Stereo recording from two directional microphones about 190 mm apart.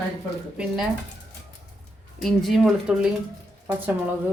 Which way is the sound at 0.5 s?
5° right (ahead or behind).